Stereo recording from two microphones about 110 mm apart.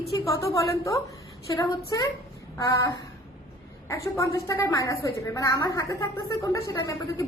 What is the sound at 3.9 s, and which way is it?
A woman's voice, 25° left (ahead or behind).